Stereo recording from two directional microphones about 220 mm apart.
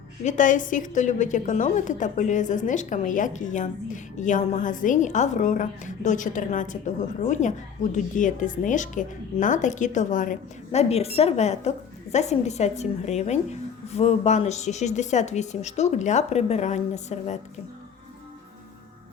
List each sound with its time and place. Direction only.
0.3 s a woman's voice: 35° left (ahead or behind)